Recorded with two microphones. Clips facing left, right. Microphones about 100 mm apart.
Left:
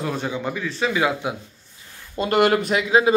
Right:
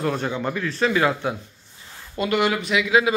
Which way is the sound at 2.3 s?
45° left (ahead or behind).